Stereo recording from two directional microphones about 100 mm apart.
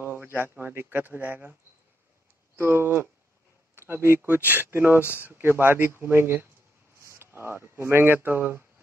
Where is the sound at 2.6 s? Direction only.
25° right (ahead or behind).